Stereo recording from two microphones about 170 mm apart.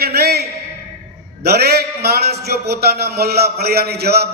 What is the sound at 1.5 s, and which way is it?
A man's voice, 70° right (ahead or behind).